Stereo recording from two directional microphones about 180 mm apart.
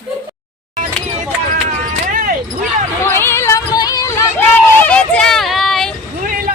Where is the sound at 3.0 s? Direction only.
15° left (ahead or behind).